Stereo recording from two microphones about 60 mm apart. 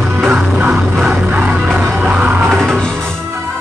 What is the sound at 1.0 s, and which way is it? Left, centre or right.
Music, right.